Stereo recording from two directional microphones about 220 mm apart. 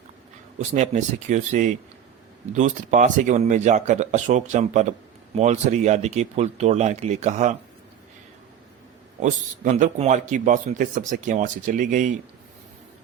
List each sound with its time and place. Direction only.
0.6 s speech: 30° right (ahead or behind)
9.6 s speech: 35° right (ahead or behind)